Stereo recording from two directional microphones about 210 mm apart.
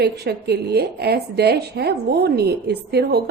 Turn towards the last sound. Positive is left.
turn(degrees=-50)  # may be behind; listen again after turning